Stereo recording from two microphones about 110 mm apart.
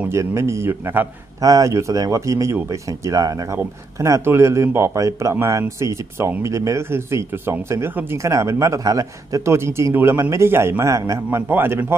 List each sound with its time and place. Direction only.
0.1 s a man's voice: 25° right (ahead or behind)
1.4 s a man's voice: 30° right (ahead or behind)
11.2 s a man's voice: 15° right (ahead or behind)